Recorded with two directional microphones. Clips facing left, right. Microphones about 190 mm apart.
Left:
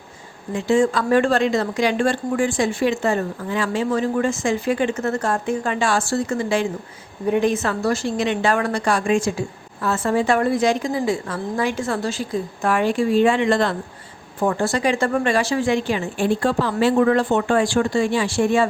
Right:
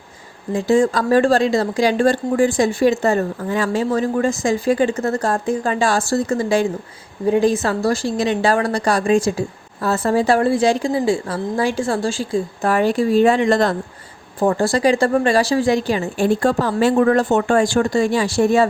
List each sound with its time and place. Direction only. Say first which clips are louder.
0.5 s speech: right 2 dB; 40° right (ahead or behind)